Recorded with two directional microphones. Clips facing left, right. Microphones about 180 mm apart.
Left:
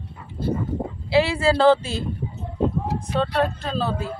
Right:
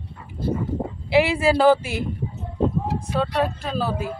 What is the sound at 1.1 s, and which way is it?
Speech, 15° right (ahead or behind).